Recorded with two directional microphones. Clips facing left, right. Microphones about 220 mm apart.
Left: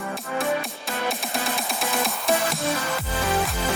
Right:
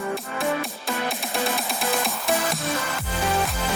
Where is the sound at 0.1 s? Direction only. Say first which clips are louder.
Left 3 dB; centre (ahead or behind).